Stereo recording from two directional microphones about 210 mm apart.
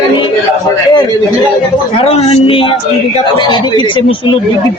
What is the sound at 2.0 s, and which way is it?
A man's voice, 30° left (ahead or behind).